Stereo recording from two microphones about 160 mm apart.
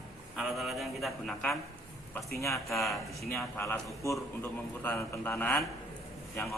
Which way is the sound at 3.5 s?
15° left (ahead or behind).